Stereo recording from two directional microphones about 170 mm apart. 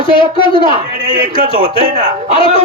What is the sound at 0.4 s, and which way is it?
Speech, 30° left (ahead or behind).